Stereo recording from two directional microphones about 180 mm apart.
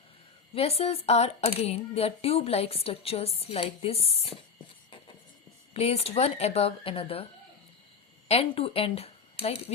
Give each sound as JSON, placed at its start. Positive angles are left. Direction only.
{"t": 0.5, "sound": "a woman's voice", "side_deg": 35}
{"t": 5.7, "sound": "a woman's voice", "side_deg": 35}
{"t": 8.3, "sound": "speech", "side_deg": 35}